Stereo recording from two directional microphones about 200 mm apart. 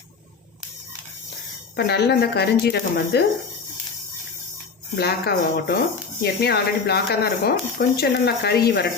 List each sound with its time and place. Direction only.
1.7 s speech: 55° left (ahead or behind)
4.9 s speech: 55° left (ahead or behind)